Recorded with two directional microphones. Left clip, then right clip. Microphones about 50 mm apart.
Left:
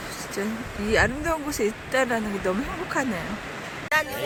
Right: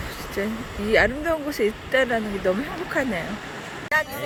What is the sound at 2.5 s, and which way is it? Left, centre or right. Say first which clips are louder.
Speech: right 4 dB; right.